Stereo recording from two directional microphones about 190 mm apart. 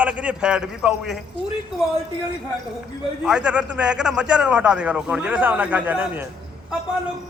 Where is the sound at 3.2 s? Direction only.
5° right (ahead or behind).